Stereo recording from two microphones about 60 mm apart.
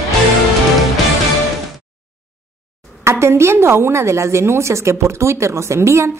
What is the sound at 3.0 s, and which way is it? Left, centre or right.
A woman's voice, right.